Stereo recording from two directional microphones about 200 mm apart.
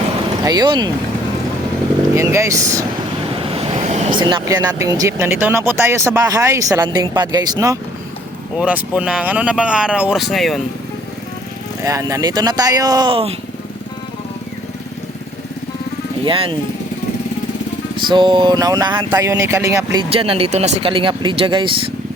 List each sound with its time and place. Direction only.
0.4 s speech: 20° right (ahead or behind)
2.1 s speech: 15° right (ahead or behind)
3.3 s vehicle: 30° right (ahead or behind)
4.2 s speech: 25° right (ahead or behind)
8.5 s speech: 5° right (ahead or behind)
11.8 s speech: 15° right (ahead or behind)
16.2 s speech: 25° right (ahead or behind)
18.1 s speech: 25° right (ahead or behind)
20.1 s speech: 30° right (ahead or behind)